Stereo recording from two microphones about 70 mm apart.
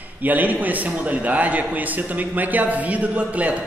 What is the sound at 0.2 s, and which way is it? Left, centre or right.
A man's voice, right.